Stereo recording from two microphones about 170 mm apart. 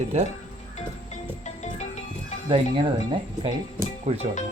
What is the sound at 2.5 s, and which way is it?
Speech, 30° right (ahead or behind).